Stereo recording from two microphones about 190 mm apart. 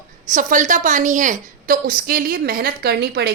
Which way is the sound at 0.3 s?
40° right (ahead or behind).